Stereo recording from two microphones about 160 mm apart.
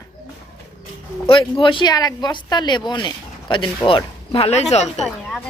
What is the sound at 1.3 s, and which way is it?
Speech, 35° left (ahead or behind).